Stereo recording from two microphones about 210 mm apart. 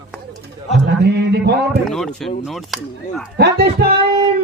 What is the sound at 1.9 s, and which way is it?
Speech, centre (ahead or behind).